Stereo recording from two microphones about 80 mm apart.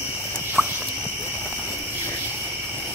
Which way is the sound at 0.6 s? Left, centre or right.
Centre.